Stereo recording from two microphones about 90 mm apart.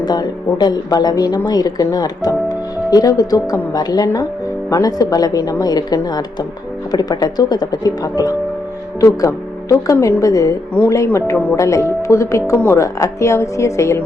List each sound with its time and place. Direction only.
0.0 s a woman's voice: 50° left (ahead or behind); by 14.0 s 35° left (ahead or behind)